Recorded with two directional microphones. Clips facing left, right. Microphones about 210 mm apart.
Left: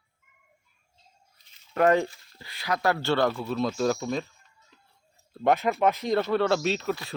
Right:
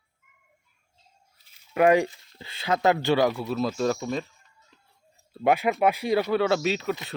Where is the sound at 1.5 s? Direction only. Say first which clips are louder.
Right 2 dB; 10° right (ahead or behind).